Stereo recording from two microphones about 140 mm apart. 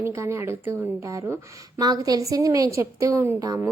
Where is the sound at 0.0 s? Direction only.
20° right (ahead or behind).